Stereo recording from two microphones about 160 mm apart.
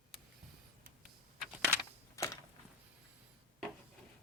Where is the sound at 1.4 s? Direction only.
10° right (ahead or behind).